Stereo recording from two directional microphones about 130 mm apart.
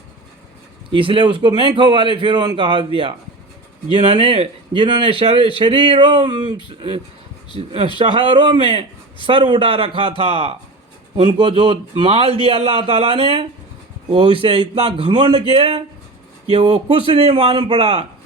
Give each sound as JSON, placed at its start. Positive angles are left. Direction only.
{"t": 0.9, "sound": "a man's voice", "side_deg": -40}
{"t": 15.4, "sound": "speech", "side_deg": -50}